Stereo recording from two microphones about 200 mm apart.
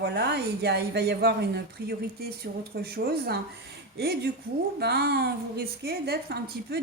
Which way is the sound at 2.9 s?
50° right (ahead or behind).